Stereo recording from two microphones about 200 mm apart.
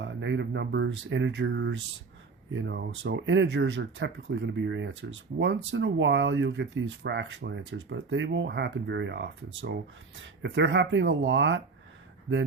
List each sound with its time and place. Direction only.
0.0 s speech: 65° right (ahead or behind)